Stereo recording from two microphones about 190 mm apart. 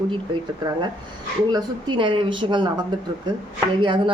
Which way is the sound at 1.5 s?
25° right (ahead or behind).